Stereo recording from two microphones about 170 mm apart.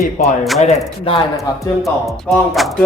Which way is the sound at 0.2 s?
50° left (ahead or behind).